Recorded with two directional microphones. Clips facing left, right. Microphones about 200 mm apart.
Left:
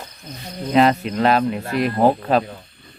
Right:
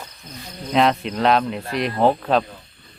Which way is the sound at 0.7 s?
5° left (ahead or behind).